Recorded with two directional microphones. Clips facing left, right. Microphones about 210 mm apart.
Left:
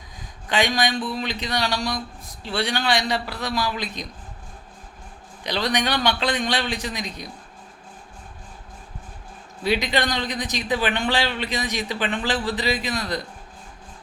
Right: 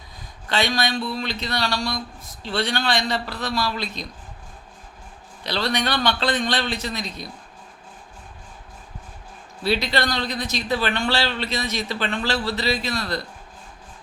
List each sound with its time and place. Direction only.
0.4 s speech: 15° left (ahead or behind)
5.4 s speech: 15° left (ahead or behind)
9.6 s speech: 15° left (ahead or behind)